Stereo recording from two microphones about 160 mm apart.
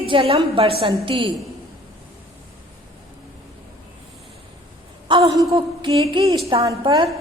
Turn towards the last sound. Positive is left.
turn(degrees=-30)  # may be behind; listen again after turning